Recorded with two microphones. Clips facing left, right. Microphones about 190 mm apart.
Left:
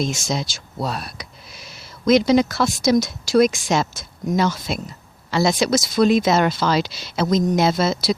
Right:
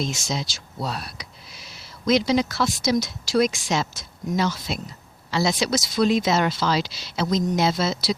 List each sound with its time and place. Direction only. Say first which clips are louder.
0.0 s speech: left 4 dB; 50° left (ahead or behind)